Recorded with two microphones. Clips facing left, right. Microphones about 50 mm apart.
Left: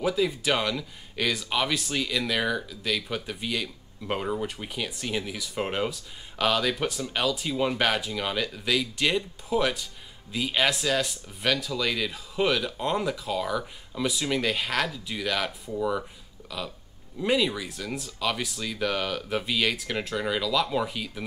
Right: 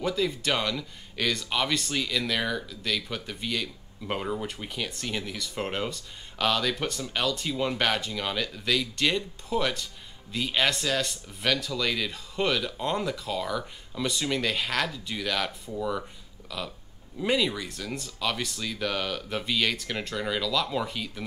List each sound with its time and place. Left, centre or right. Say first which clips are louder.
0.0 s speech: left 2 dB; centre